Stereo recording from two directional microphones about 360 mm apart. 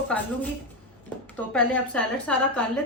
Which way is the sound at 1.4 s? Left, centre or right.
Centre.